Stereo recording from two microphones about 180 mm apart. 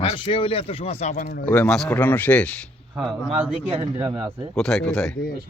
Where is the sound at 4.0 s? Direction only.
25° right (ahead or behind).